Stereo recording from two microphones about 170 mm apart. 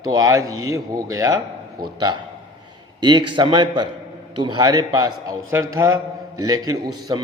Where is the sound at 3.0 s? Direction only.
25° right (ahead or behind).